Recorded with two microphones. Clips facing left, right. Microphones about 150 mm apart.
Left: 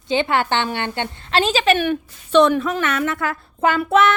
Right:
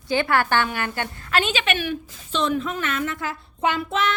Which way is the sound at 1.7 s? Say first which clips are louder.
Left 6 dB; 60° left (ahead or behind).